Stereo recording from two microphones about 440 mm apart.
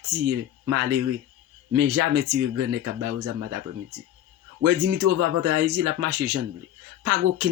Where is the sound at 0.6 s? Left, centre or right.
Right.